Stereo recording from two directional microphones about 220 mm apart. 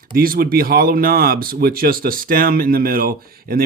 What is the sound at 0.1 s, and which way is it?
Speech, 40° right (ahead or behind).